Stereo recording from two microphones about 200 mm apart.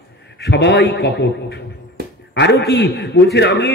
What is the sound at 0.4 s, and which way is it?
A man's voice, 60° left (ahead or behind).